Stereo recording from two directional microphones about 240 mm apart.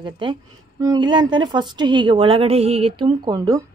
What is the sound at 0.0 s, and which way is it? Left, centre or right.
A woman's voice, centre.